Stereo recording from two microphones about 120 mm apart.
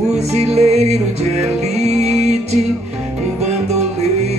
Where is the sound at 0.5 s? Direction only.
65° right (ahead or behind).